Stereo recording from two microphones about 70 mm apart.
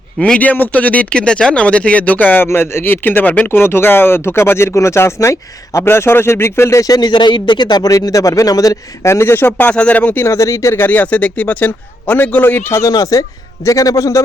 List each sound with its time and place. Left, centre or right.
0.2 s speech: centre; by 6.9 s left
6.9 s speech: left
9.0 s speech: left
10.2 s speech: left
10.8 s speech: left
12.9 s speech: left